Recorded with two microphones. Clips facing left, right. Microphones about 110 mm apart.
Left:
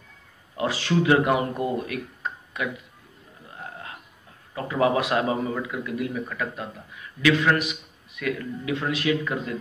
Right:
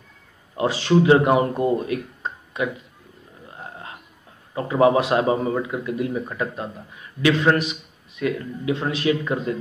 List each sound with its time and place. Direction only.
0.6 s speech: 25° right (ahead or behind)
4.6 s a man's voice: 30° right (ahead or behind)